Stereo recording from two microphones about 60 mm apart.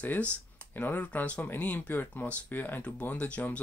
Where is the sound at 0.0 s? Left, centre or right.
Left.